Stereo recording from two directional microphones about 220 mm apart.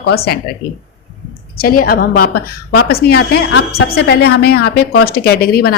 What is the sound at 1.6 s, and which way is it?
A woman's voice, 40° left (ahead or behind).